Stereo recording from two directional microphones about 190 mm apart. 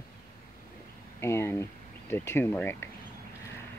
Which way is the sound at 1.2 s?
15° left (ahead or behind).